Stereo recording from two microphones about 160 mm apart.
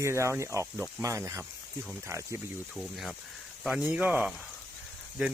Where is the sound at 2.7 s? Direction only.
Centre (ahead or behind).